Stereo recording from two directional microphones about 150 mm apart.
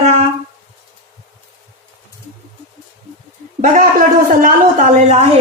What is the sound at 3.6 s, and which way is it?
Speech, 65° right (ahead or behind).